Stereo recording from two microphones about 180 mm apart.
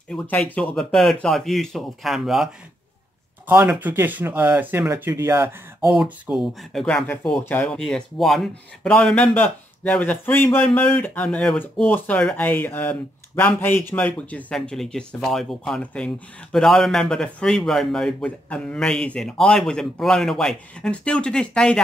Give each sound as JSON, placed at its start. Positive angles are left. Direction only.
{"t": 0.1, "sound": "a man's voice", "side_deg": 5}